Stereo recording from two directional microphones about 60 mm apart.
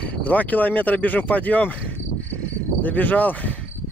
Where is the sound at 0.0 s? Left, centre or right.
Left.